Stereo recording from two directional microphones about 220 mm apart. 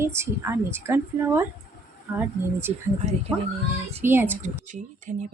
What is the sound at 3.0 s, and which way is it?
Speech, 30° right (ahead or behind).